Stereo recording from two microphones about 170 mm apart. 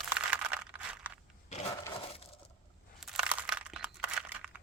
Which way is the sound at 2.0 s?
35° left (ahead or behind).